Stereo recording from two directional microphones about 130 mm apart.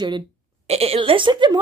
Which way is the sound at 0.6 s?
50° right (ahead or behind).